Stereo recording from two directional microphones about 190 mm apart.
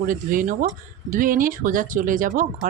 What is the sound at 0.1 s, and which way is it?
Speech, 45° right (ahead or behind).